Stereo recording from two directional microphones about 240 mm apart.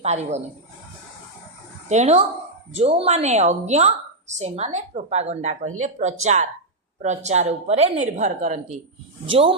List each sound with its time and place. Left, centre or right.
0.0 s a woman's voice: right
1.9 s a woman's voice: right